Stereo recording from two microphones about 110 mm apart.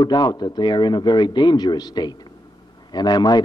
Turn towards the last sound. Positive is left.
turn(degrees=40)  # may be behind; listen again after turning